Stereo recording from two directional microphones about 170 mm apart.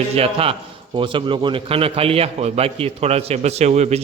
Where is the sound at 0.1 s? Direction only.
35° right (ahead or behind).